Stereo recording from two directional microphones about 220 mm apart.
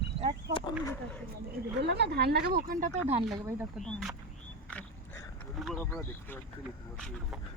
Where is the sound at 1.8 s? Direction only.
50° right (ahead or behind); by 3.2 s 30° right (ahead or behind).